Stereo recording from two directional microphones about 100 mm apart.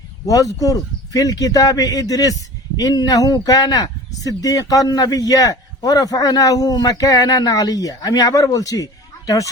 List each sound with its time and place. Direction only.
0.3 s speech: 35° left (ahead or behind)